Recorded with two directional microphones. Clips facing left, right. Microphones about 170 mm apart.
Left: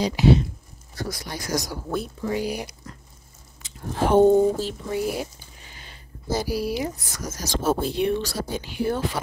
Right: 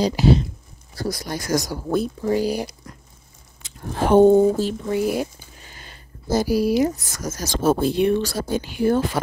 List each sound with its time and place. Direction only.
0.0 s speech: 35° right (ahead or behind)
4.1 s speech: 55° right (ahead or behind)